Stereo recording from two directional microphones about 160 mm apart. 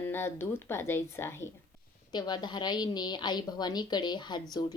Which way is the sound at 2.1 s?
25° left (ahead or behind).